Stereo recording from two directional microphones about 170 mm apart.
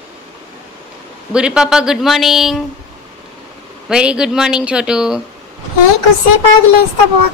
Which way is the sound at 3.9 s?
5° right (ahead or behind).